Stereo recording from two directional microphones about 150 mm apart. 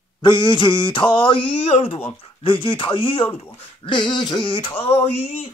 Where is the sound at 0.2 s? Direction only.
30° left (ahead or behind).